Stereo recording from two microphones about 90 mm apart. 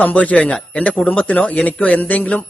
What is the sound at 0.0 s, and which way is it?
Speech, 15° left (ahead or behind).